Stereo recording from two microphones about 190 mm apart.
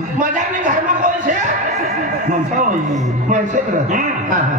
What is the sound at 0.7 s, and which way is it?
Speech, 40° right (ahead or behind).